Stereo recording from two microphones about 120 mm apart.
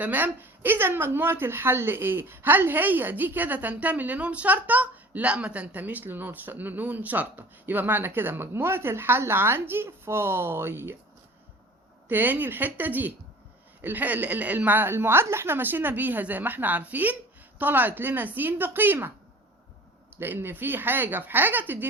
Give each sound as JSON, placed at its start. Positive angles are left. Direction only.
{"t": 0.0, "sound": "a woman's voice", "side_deg": -15}
{"t": 12.0, "sound": "a woman's voice", "side_deg": -15}
{"t": 20.1, "sound": "a woman's voice", "side_deg": -15}